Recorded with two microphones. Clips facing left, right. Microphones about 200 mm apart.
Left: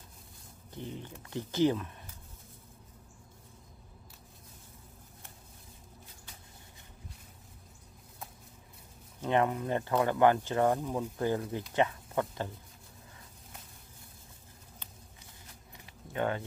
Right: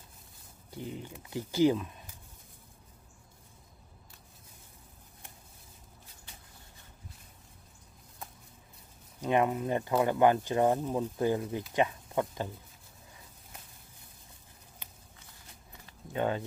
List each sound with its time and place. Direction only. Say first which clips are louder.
0.7 s speech: right 1 dB; 10° right (ahead or behind)
9.2 s speech: right 1 dB; 15° right (ahead or behind)
16.1 s speech: right 1 dB; 20° right (ahead or behind)